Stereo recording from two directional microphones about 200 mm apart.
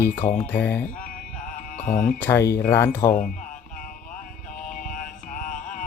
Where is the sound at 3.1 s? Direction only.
40° left (ahead or behind).